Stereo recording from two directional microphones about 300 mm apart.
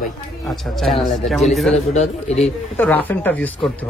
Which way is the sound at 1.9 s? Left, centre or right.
Left.